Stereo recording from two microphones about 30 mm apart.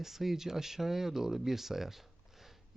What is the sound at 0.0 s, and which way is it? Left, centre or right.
Speech, centre.